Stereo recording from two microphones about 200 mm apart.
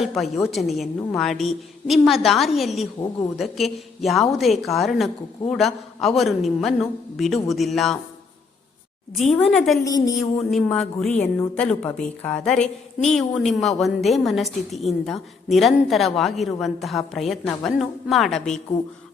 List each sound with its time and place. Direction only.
0.0 s a woman's voice: centre (ahead or behind)
9.1 s a woman's voice: centre (ahead or behind)
9.8 s speech: 15° left (ahead or behind)
10.2 s a woman's voice: centre (ahead or behind)